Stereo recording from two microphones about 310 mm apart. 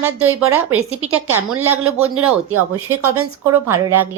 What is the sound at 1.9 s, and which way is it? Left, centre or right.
Speech, right.